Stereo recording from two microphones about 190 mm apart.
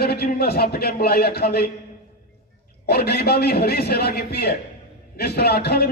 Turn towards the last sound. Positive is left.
turn(degrees=55)  # may be behind; listen again after turning